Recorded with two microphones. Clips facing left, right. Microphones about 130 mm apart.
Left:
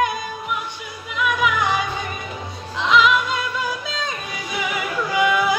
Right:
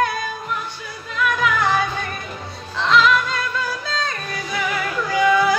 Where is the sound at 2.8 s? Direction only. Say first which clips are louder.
Even; 10° left (ahead or behind).